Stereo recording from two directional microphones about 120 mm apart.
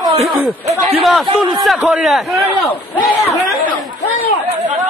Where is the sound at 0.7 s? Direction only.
60° right (ahead or behind).